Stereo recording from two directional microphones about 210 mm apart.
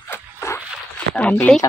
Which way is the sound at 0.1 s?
10° left (ahead or behind).